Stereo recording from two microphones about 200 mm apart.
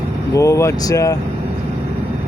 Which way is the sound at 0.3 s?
15° left (ahead or behind).